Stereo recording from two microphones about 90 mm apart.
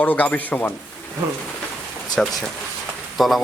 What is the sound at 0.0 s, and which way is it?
Speech, 20° left (ahead or behind).